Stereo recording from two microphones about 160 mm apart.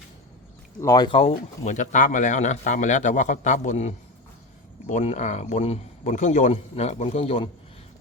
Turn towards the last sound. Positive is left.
turn(degrees=40)  # may be behind; listen again after turning